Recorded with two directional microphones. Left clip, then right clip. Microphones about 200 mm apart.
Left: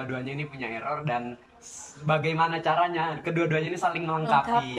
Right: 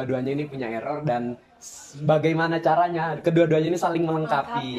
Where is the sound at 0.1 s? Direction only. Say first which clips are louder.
Right 7 dB; 30° right (ahead or behind).